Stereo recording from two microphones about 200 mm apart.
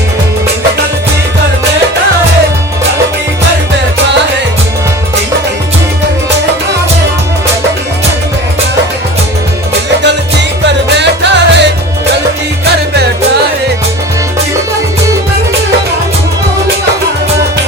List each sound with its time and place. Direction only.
10.9 s music: 60° right (ahead or behind)